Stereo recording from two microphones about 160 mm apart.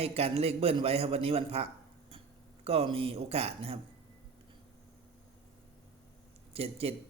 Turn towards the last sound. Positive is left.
turn(degrees=-40)  # may be behind; listen again after turning